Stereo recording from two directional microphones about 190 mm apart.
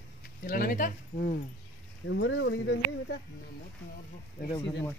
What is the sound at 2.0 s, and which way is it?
Speech, 80° left.